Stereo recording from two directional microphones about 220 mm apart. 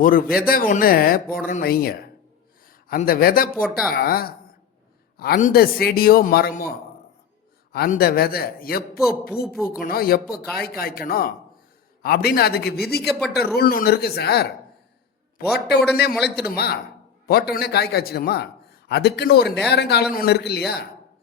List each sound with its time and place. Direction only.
0.0 s a man's voice: 40° left (ahead or behind)
3.5 s speech: centre (ahead or behind)
3.8 s a man's voice: 45° left (ahead or behind)
15.5 s a man's voice: 50° left (ahead or behind)